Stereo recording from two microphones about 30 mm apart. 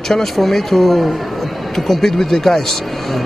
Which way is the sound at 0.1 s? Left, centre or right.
Centre.